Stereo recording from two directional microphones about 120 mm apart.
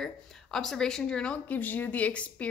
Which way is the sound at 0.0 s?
5° left (ahead or behind).